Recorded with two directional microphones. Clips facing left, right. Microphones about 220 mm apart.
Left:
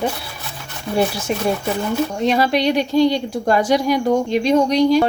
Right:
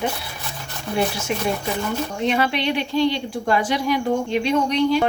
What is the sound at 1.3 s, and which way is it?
A woman's voice, 40° left (ahead or behind).